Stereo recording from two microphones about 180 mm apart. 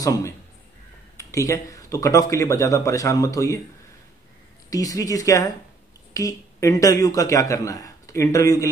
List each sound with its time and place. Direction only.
0.0 s speech: 20° left (ahead or behind)
4.6 s speech: 20° left (ahead or behind)